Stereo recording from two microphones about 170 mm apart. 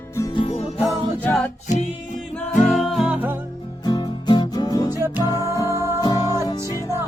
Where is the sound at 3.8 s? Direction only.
25° left (ahead or behind).